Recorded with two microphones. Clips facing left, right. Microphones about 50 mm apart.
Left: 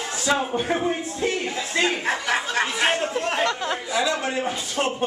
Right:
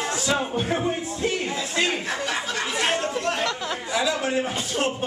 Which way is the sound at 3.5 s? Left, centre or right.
Centre.